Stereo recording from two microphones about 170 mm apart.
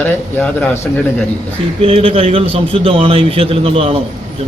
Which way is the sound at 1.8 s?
35° right (ahead or behind).